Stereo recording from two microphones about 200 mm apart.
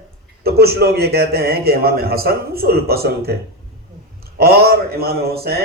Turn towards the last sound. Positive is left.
turn(degrees=-50)  # may be behind; listen again after turning